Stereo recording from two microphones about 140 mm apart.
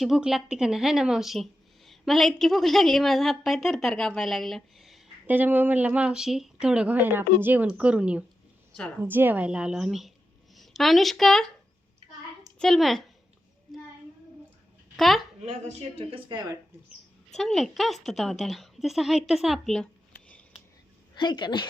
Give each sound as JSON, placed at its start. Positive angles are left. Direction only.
{"t": 0.0, "sound": "a woman's voice", "side_deg": -5}
{"t": 5.2, "sound": "a woman's voice", "side_deg": -15}
{"t": 12.5, "sound": "a woman's voice", "side_deg": 0}
{"t": 14.9, "sound": "speech", "side_deg": 0}
{"t": 15.6, "sound": "speech", "side_deg": -45}
{"t": 17.3, "sound": "a woman's voice", "side_deg": 5}
{"t": 21.2, "sound": "a woman's voice", "side_deg": 35}